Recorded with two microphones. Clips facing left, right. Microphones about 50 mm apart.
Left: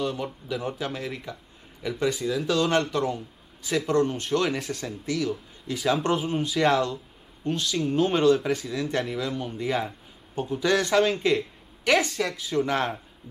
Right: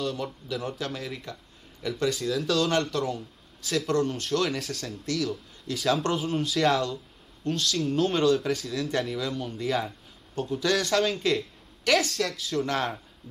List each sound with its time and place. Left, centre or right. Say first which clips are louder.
0.0 s speech: left 2 dB; centre